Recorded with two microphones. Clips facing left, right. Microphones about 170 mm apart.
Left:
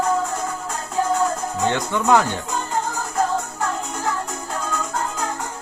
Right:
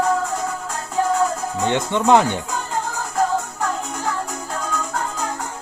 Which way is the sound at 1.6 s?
20° right (ahead or behind).